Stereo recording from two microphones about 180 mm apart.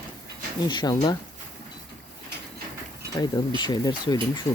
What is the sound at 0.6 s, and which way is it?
Speech, 25° left (ahead or behind).